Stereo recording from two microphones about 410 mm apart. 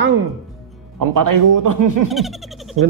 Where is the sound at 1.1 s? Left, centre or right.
Right.